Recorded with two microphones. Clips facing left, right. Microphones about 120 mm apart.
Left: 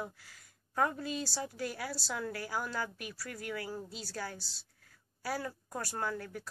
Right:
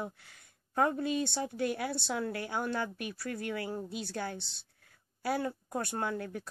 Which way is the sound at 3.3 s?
25° right (ahead or behind).